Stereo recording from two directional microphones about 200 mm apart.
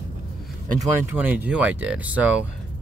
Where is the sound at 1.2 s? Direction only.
10° right (ahead or behind).